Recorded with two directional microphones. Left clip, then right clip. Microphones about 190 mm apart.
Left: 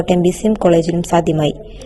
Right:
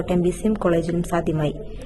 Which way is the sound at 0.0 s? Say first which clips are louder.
Left 7 dB; 30° left (ahead or behind).